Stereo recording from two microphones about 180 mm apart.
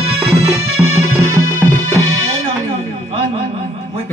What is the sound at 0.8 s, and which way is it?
Music, 5° right (ahead or behind).